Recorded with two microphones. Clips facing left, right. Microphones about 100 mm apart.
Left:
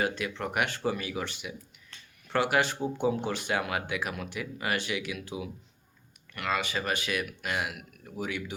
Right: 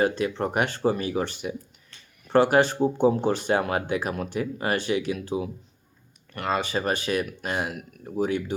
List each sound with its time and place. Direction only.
0.0 s speech: 35° right (ahead or behind)